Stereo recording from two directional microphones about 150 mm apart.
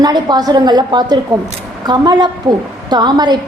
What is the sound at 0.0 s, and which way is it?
A woman's voice, 30° right (ahead or behind).